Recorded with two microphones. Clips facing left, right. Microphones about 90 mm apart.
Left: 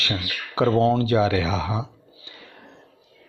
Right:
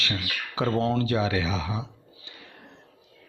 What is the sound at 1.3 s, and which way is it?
Speech, 60° left (ahead or behind).